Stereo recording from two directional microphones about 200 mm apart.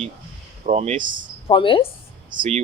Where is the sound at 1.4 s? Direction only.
25° left (ahead or behind).